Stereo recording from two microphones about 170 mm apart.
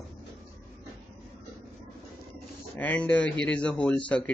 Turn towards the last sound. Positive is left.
turn(degrees=5)  # may be behind; listen again after turning